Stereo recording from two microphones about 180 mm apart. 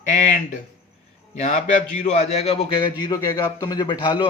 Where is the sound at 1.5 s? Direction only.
45° left (ahead or behind).